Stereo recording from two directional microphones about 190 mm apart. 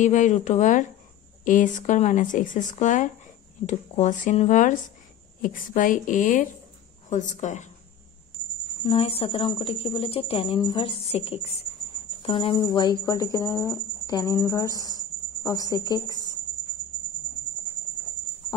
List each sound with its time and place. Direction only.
0.0 s a woman's voice: 40° left (ahead or behind)
8.8 s speech: 30° left (ahead or behind)